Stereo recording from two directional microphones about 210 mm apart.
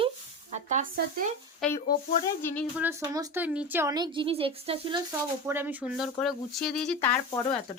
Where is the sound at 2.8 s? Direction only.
15° right (ahead or behind).